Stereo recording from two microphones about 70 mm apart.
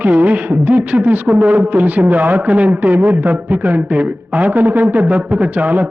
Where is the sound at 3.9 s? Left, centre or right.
Centre.